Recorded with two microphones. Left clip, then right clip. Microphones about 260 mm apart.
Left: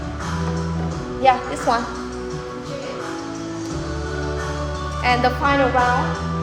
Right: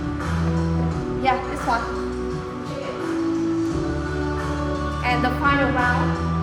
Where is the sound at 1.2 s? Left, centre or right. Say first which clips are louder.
Left 6 dB; left.